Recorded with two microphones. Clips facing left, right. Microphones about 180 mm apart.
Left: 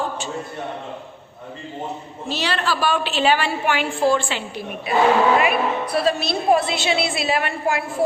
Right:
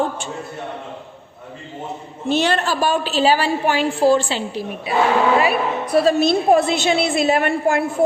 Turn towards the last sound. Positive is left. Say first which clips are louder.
# right 5 dB
turn(degrees=-50)  # may be behind; listen again after turning